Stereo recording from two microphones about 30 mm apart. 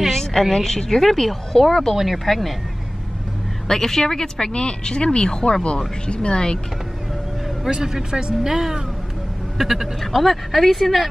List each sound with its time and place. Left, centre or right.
0.1 s a sound: centre
0.4 s speech: centre
0.7 s speech: centre
2.0 s speech: centre
3.6 s speech: centre
4.5 s speech: left
7.7 s speech: right
9.9 s speech: centre